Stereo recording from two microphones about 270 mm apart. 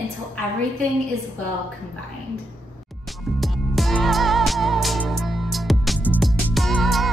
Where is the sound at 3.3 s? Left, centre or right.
Centre.